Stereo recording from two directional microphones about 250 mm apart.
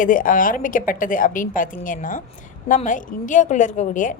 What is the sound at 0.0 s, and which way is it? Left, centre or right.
A woman's voice, left.